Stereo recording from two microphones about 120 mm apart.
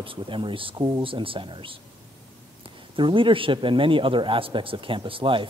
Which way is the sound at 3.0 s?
45° right (ahead or behind).